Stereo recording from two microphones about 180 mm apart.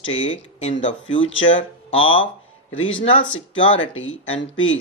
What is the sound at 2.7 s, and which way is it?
Speech, 90° left.